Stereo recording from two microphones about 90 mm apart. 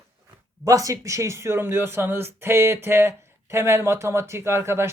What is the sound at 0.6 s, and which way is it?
Speech, 40° right (ahead or behind).